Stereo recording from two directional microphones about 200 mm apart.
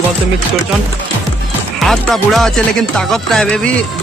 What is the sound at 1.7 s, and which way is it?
Speech, centre (ahead or behind).